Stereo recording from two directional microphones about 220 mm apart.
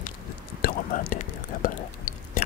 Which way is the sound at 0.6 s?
40° left (ahead or behind).